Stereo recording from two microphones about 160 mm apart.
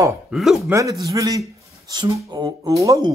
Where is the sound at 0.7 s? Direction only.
20° right (ahead or behind).